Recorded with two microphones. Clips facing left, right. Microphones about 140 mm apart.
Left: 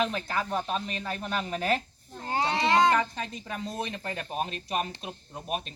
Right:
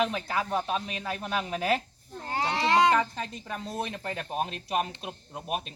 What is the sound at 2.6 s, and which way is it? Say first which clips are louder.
Speech: right 1 dB; centre (ahead or behind).